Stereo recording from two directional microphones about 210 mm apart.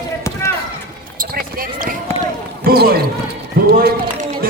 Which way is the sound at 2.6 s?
45° right (ahead or behind).